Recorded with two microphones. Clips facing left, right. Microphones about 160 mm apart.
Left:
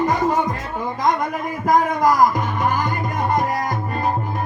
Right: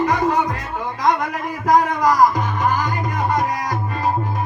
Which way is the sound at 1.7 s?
50° left (ahead or behind).